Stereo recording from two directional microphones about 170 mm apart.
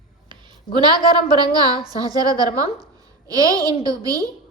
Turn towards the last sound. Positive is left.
turn(degrees=-20)  # may be behind; listen again after turning